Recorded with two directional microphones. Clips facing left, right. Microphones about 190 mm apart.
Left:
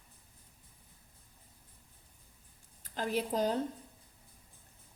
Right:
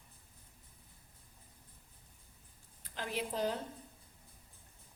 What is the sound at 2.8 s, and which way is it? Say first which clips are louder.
Speech: left 5 dB; 40° left (ahead or behind).